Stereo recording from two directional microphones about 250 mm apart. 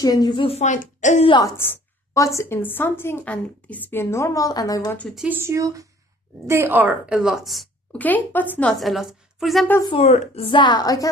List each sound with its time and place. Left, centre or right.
0.0 s a woman's voice: centre
9.9 s a woman's voice: left